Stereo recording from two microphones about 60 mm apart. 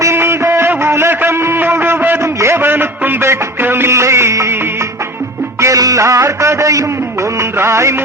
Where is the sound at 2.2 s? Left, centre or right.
Right.